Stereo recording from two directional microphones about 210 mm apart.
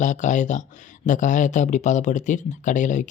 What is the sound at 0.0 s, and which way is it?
Speech, 35° left (ahead or behind).